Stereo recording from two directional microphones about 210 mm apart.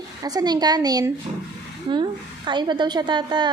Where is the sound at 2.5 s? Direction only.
20° right (ahead or behind).